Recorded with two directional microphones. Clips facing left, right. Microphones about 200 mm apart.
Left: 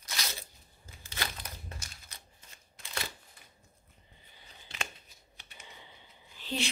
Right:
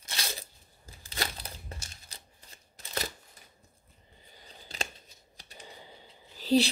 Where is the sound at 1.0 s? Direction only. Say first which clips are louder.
Right 3 dB; 35° right (ahead or behind).